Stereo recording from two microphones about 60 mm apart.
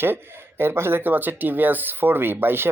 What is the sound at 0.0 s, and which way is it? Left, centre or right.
Speech, right.